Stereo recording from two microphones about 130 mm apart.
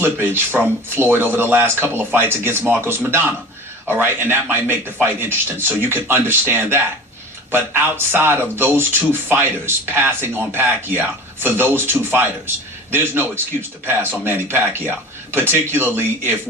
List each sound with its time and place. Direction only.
0.0 s speech: 15° right (ahead or behind)